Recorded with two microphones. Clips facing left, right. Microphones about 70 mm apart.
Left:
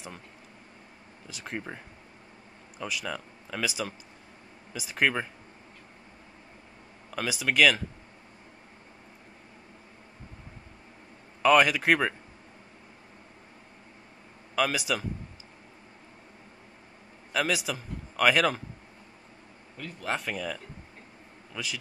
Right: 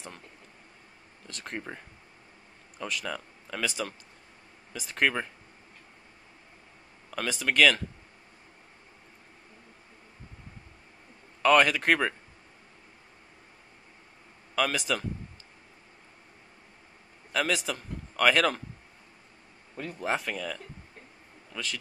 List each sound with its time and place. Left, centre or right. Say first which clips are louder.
1.2 s a man's voice: left 1 dB; centre
2.8 s a man's voice: even; centre
7.1 s a man's voice: even; centre
11.4 s a man's voice: left 1 dB; centre
14.5 s speech: left 1 dB; centre
17.3 s a man's voice: even; centre
19.8 s speech: right 5 dB; right
20.2 s a man's voice: left 1 dB; centre